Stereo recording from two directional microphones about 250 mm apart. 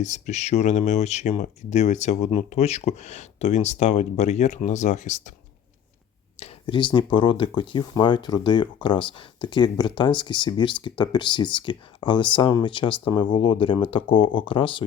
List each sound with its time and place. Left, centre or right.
0.0 s speech: left
6.4 s speech: centre